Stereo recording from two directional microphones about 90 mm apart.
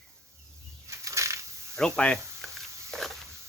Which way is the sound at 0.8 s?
35° right (ahead or behind).